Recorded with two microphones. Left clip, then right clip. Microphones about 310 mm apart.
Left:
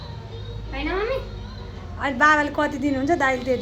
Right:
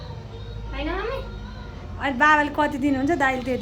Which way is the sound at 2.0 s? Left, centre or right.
Centre.